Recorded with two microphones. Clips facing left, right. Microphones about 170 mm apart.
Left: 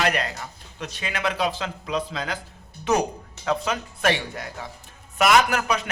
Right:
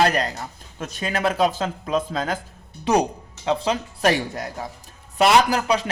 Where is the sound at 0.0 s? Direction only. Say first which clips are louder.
Right 4 dB; 40° right (ahead or behind).